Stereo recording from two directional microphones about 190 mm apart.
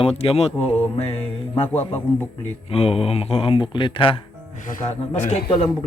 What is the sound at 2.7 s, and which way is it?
A man's voice, 30° left (ahead or behind).